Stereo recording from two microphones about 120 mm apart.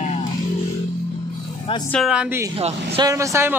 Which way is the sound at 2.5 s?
55° right (ahead or behind).